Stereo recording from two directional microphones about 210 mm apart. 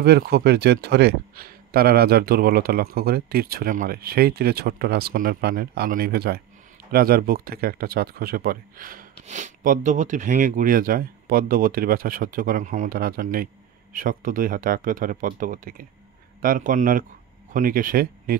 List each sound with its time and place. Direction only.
0.0 s speech: 50° right (ahead or behind)